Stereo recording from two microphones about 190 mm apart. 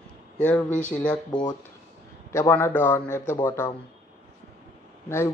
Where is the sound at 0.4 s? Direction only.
5° left (ahead or behind).